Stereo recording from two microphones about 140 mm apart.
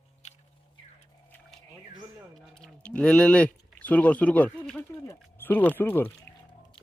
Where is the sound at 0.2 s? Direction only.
55° left (ahead or behind).